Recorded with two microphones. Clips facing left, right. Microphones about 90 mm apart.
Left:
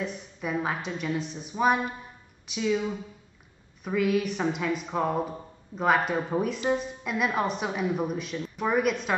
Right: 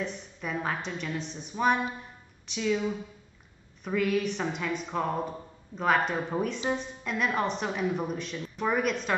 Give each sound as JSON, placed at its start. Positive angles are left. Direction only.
{"t": 0.0, "sound": "a woman's voice", "side_deg": 5}